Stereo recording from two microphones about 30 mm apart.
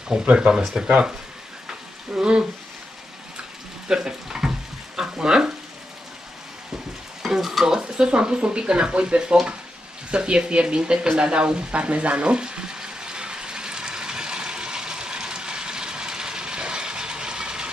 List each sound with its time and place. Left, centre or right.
0.2 s speech: right
1.7 s a sound: right
3.9 s frying: right
5.1 s speech: right
7.2 s stir: centre
7.6 s speech: right
11.0 s frying: right